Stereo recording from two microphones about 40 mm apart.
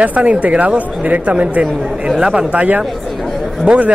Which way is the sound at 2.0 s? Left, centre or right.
Centre.